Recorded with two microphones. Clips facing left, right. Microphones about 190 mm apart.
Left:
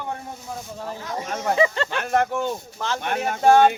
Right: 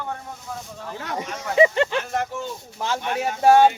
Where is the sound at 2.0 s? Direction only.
60° left (ahead or behind).